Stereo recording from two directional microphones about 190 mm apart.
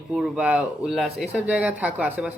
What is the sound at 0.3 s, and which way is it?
Speech, 5° right (ahead or behind).